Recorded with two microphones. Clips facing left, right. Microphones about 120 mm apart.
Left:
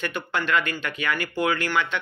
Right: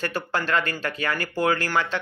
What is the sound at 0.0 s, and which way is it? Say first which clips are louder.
Speech: right 1 dB; 35° right (ahead or behind).